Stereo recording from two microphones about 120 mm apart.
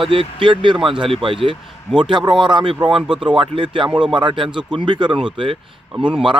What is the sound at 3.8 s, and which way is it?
Speech, 10° right (ahead or behind).